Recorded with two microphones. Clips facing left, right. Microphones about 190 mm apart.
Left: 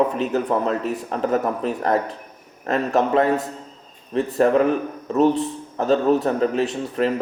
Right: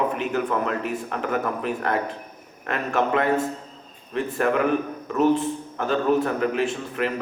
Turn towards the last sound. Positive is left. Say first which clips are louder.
# left 3 dB
turn(degrees=35)  # may be behind; listen again after turning